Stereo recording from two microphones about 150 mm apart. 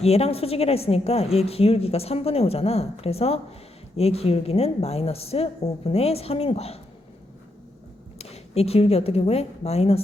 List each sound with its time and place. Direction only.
0.0 s a woman's voice: 45° left (ahead or behind)
8.2 s a woman's voice: 45° left (ahead or behind)